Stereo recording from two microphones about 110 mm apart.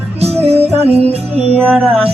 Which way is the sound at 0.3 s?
70° right (ahead or behind).